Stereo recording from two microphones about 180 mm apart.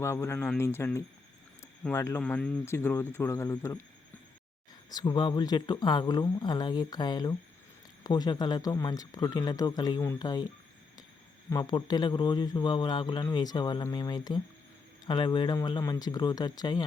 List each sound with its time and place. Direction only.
0.0 s speech: 15° left (ahead or behind)
4.9 s speech: 25° left (ahead or behind)
11.4 s speech: 20° left (ahead or behind)